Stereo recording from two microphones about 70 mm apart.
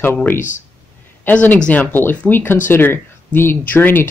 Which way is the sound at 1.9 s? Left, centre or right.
Left.